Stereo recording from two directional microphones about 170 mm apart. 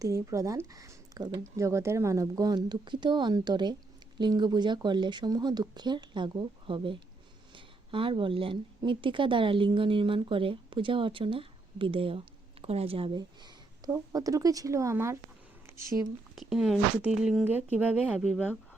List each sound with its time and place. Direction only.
0.0 s a woman's voice: 20° right (ahead or behind)
16.3 s a woman's voice: centre (ahead or behind)